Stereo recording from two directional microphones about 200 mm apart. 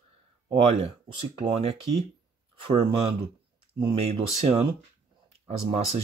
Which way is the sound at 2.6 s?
30° right (ahead or behind).